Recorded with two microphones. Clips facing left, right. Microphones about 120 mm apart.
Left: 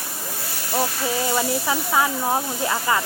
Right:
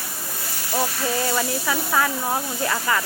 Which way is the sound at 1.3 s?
15° left (ahead or behind).